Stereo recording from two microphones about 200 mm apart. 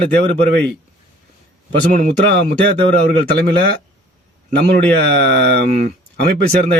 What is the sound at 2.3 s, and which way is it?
Speech, 55° right (ahead or behind).